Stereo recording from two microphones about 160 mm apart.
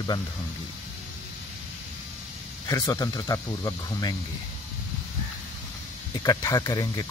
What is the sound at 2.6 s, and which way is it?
Speech, 20° left (ahead or behind).